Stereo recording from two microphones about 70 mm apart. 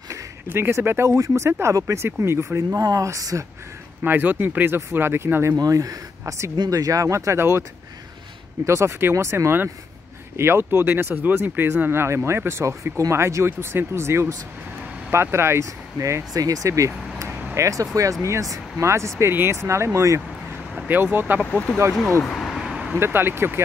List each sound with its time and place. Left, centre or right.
0.5 s speech: right
2.8 s speech: right
4.0 s speech: right
5.6 s speech: right
8.6 s speech: right
16.0 s speech: right
20.7 s vehicle: centre
21.0 s speech: right
22.2 s a sound: centre
22.7 s vehicle: centre
22.9 s speech: right